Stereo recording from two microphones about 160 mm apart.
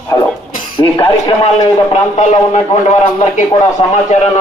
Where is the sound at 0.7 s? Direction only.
35° left (ahead or behind).